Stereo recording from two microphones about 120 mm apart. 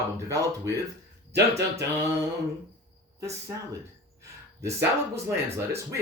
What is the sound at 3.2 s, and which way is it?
Speech, 25° right (ahead or behind).